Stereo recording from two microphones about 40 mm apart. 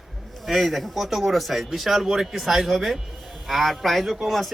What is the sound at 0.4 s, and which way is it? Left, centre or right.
Speech, centre.